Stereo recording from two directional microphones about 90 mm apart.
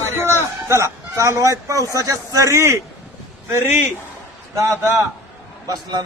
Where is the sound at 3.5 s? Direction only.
25° right (ahead or behind).